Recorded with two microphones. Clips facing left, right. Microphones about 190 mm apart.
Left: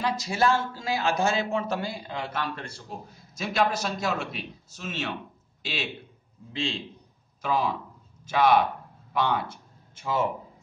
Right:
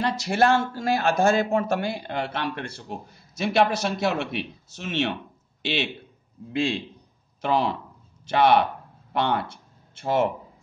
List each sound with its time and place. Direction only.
0.0 s a man's voice: 65° right (ahead or behind); by 1.8 s 50° right (ahead or behind)
1.8 s a man's voice: 70° right (ahead or behind)
7.4 s a man's voice: 65° right (ahead or behind)